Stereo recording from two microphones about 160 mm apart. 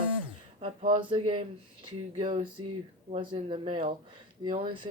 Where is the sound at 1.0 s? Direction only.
35° right (ahead or behind).